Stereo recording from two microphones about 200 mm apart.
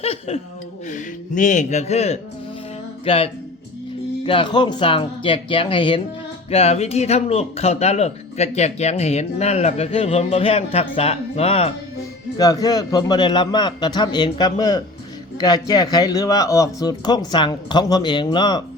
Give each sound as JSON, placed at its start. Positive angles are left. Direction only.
{"t": 0.0, "sound": "a man's voice", "side_deg": 30}
{"t": 12.4, "sound": "a man's voice", "side_deg": 20}